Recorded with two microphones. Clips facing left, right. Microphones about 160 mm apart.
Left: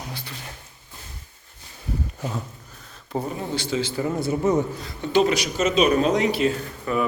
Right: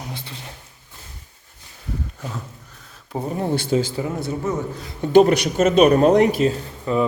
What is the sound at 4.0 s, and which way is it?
Speech, 5° right (ahead or behind).